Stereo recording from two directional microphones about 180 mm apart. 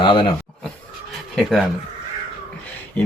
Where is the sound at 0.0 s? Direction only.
25° left (ahead or behind).